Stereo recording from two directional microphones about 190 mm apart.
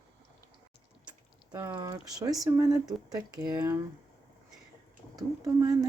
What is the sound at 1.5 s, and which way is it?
Speech, 15° right (ahead or behind).